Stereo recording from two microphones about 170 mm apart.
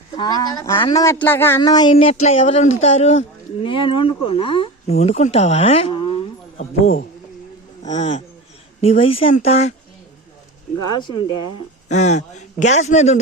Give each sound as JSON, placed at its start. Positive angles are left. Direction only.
{"t": 0.2, "sound": "speech", "side_deg": 25}
{"t": 7.8, "sound": "speech", "side_deg": 45}
{"t": 10.9, "sound": "speech", "side_deg": 25}
{"t": 11.9, "sound": "a man's voice", "side_deg": 40}